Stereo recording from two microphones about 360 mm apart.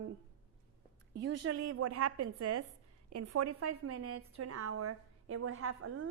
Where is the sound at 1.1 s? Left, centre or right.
Right.